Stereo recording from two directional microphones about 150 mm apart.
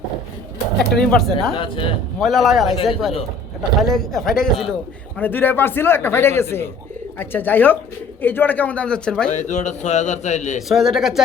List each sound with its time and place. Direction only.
0.8 s speech: 5° left (ahead or behind)
1.5 s a man's voice: 35° left (ahead or behind)
2.1 s speech: centre (ahead or behind)
9.3 s a man's voice: 50° left (ahead or behind)
10.7 s speech: centre (ahead or behind)